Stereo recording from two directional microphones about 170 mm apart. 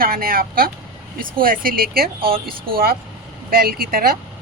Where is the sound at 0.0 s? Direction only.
60° right (ahead or behind).